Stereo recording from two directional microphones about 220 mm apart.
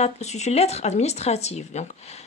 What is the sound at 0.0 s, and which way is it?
Speech, 30° left (ahead or behind).